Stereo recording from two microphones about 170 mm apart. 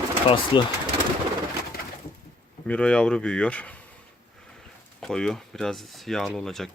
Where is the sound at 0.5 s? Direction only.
30° left (ahead or behind).